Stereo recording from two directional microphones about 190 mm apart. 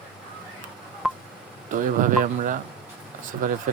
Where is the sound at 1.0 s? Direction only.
Centre (ahead or behind).